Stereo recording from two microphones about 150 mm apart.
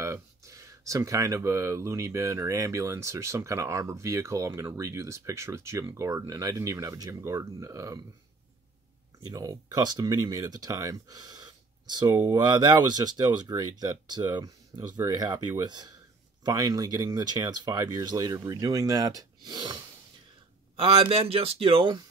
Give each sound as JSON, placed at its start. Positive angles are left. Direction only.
{"t": 0.0, "sound": "speech", "side_deg": -20}
{"t": 9.3, "sound": "speech", "side_deg": -25}
{"t": 20.7, "sound": "speech", "side_deg": -40}